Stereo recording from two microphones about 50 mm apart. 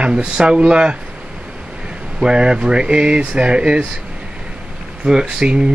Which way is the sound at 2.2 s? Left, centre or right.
Centre.